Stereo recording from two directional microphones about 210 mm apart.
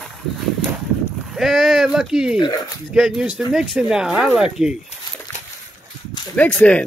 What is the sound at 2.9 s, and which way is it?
Speech, centre (ahead or behind).